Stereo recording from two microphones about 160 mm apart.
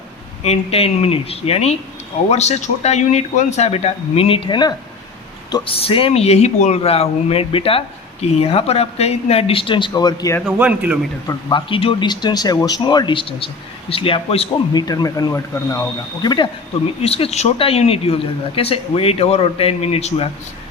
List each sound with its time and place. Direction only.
0.4 s a man's voice: 40° left (ahead or behind)
10.4 s speech: 10° right (ahead or behind)
11.3 s speech: 25° left (ahead or behind)
14.7 s speech: 25° left (ahead or behind)
17.0 s speech: 40° left (ahead or behind)